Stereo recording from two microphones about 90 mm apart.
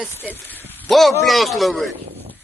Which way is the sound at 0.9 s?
Centre (ahead or behind).